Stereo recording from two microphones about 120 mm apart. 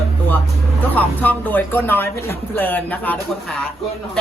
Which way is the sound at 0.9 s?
15° left (ahead or behind).